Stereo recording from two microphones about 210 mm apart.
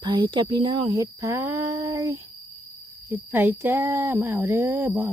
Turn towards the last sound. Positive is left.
turn(degrees=-10)  # may be behind; listen again after turning